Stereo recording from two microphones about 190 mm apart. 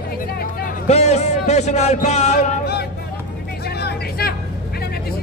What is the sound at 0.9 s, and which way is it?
Speech, 35° left (ahead or behind).